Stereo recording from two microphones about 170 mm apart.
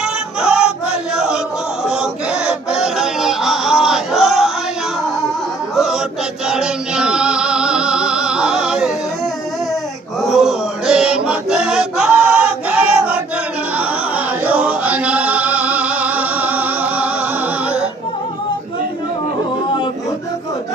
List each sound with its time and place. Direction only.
0.0 s choir: 5° right (ahead or behind)
1.1 s chant: 5° right (ahead or behind)
1.8 s music: 5° right (ahead or behind)
5.7 s chant: centre (ahead or behind)
6.5 s music: 5° right (ahead or behind)
10.2 s chant: centre (ahead or behind)
14.4 s music: 10° right (ahead or behind)
19.6 s a sound: 30° left (ahead or behind)